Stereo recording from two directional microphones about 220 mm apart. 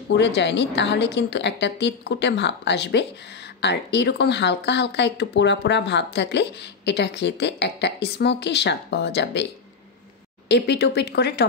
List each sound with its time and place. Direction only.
0.1 s a woman's voice: 50° left (ahead or behind)
10.5 s a woman's voice: 50° left (ahead or behind)